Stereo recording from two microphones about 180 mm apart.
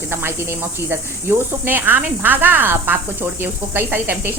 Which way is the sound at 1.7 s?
10° right (ahead or behind).